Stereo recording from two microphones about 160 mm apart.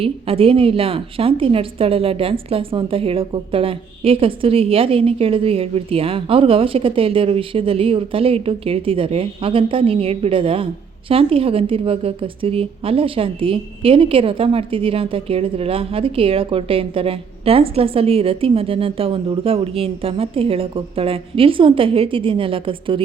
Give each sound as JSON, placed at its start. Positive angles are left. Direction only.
{"t": 0.0, "sound": "a woman's voice", "side_deg": -35}